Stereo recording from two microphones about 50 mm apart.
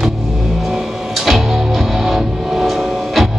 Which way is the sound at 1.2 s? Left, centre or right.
Centre.